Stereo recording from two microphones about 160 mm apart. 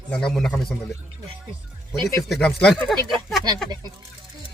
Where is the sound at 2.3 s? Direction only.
5° left (ahead or behind).